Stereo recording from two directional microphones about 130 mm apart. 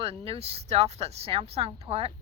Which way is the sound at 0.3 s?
50° right (ahead or behind).